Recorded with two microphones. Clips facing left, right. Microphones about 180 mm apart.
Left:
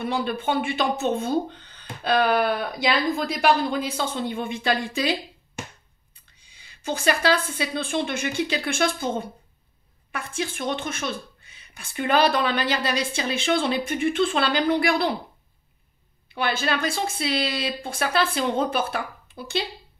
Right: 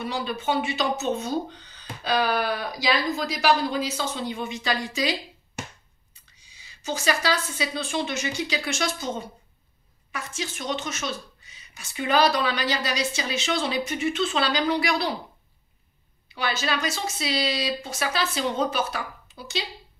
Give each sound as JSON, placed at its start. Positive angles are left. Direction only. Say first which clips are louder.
{"t": 0.0, "sound": "speech", "louder": "left 3 dB", "side_deg": 55}
{"t": 6.1, "sound": "speech", "louder": "even", "side_deg": 55}
{"t": 16.3, "sound": "speech", "louder": "left 2 dB", "side_deg": 55}